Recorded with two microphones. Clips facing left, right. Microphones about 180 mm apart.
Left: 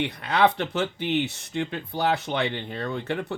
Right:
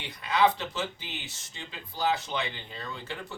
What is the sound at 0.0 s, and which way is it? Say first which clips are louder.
Speech: left 4 dB; 65° left (ahead or behind).